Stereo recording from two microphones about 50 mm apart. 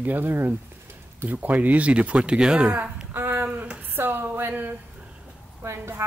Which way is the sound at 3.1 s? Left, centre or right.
Right.